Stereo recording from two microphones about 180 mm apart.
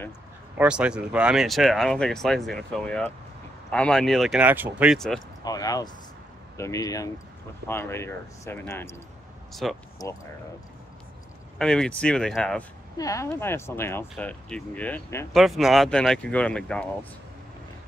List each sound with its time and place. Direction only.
0.6 s speech: 5° right (ahead or behind)
5.4 s speech: 20° left (ahead or behind)
9.5 s speech: centre (ahead or behind)
10.0 s speech: 20° left (ahead or behind)
11.5 s speech: 5° left (ahead or behind)
12.9 s speech: 20° left (ahead or behind)
15.3 s speech: centre (ahead or behind)